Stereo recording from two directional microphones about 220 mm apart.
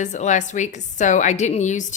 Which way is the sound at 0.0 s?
35° left (ahead or behind).